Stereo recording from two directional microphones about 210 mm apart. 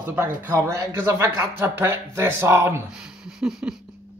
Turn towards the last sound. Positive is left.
turn(degrees=-5)  # may be behind; listen again after turning